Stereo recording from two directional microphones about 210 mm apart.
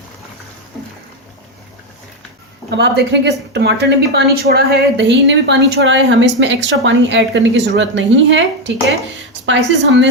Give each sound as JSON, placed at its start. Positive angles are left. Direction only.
{"t": 2.6, "sound": "speech", "side_deg": -55}